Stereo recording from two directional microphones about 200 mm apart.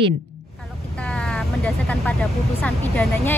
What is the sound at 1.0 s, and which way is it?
Vehicle, 5° left (ahead or behind).